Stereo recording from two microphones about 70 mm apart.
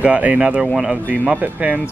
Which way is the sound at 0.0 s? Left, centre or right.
Centre.